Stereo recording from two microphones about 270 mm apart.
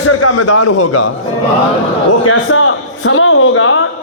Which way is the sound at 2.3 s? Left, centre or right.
Left.